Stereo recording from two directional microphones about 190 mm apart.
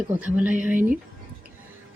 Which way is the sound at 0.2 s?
5° right (ahead or behind).